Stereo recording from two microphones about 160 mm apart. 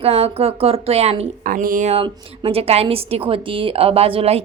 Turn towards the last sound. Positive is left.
turn(degrees=-40)  # may be behind; listen again after turning